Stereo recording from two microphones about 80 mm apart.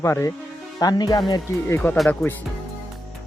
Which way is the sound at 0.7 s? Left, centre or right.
Left.